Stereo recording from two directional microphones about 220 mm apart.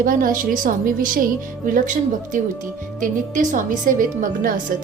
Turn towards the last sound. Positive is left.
turn(degrees=-40)  # may be behind; listen again after turning